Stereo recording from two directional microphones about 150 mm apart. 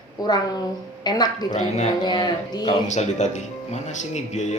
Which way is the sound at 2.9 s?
50° left (ahead or behind).